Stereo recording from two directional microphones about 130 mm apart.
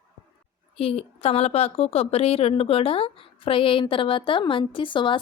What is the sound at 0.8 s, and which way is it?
A woman's voice, 50° left (ahead or behind).